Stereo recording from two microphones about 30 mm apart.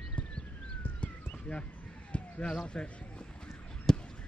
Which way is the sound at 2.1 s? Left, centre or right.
Left.